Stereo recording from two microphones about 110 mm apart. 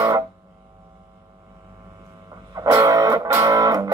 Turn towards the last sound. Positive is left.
turn(degrees=-35)  # may be behind; listen again after turning